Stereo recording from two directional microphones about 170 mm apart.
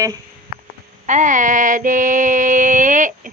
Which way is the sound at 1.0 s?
45° right (ahead or behind).